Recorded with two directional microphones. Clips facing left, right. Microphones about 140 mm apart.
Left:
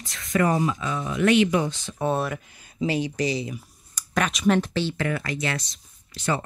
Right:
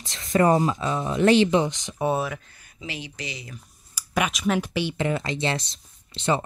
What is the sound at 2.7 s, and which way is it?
Speech, 40° left (ahead or behind).